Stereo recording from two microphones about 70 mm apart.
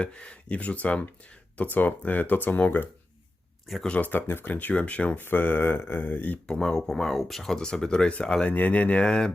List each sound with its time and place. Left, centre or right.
0.0 s speech: centre
6.5 s speech: centre